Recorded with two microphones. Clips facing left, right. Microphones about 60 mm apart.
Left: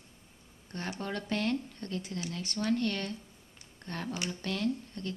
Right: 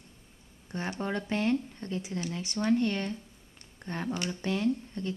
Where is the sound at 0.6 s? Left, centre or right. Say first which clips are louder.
Right 4 dB; centre.